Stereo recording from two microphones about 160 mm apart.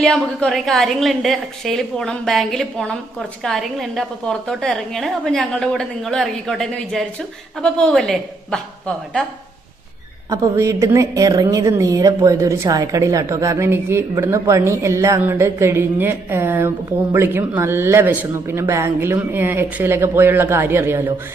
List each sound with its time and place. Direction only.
0.0 s a woman's voice: 5° left (ahead or behind)
10.2 s a woman's voice: 20° right (ahead or behind)